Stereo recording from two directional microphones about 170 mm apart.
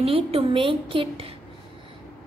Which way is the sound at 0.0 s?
35° right (ahead or behind).